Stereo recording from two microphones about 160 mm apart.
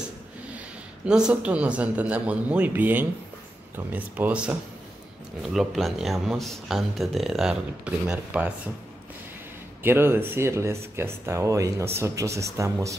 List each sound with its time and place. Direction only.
1.0 s speech: 5° right (ahead or behind)
9.8 s speech: 15° right (ahead or behind)